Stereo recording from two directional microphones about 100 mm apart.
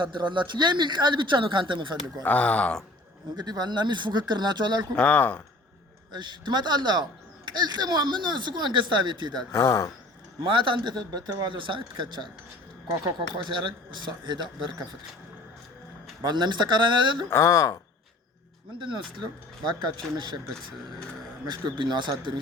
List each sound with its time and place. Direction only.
0.0 s speech: 50° right (ahead or behind)
2.2 s speech: 15° left (ahead or behind)
3.3 s speech: 45° right (ahead or behind)
4.9 s speech: 15° left (ahead or behind)
6.1 s speech: 50° right (ahead or behind)
9.5 s speech: 30° left (ahead or behind)
10.4 s speech: 55° right (ahead or behind)
11.5 s speech: 55° right (ahead or behind)
16.2 s speech: 45° right (ahead or behind)
17.2 s speech: 30° left (ahead or behind)
18.8 s speech: 55° right (ahead or behind)
21.4 s speech: 50° right (ahead or behind)